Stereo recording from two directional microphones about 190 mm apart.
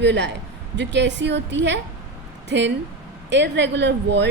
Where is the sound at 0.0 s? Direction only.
65° right (ahead or behind).